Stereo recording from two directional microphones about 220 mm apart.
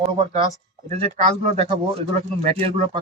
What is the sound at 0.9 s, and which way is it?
Speech, 30° right (ahead or behind).